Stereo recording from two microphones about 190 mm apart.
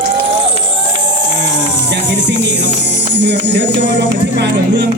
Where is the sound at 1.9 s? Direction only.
70° right (ahead or behind).